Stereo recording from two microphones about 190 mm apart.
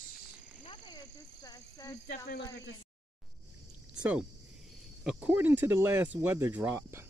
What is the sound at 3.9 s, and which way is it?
Speech, 5° right (ahead or behind).